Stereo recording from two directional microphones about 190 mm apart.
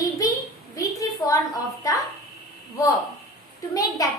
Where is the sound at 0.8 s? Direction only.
20° left (ahead or behind).